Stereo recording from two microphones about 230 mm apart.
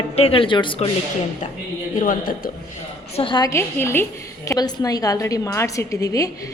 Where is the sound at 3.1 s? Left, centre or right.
Left.